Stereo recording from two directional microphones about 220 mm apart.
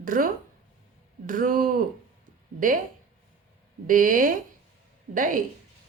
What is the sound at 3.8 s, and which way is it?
Speech, 40° right (ahead or behind).